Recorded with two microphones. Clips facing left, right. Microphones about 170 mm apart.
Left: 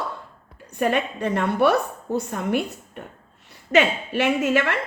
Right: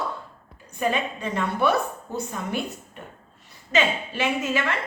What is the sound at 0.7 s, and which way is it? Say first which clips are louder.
A woman's voice: left 3 dB; 60° left (ahead or behind).